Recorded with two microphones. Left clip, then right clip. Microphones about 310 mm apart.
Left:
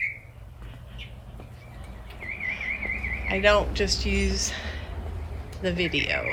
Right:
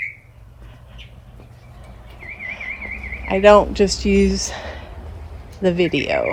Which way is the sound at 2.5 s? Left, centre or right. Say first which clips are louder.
Right 2 dB; centre.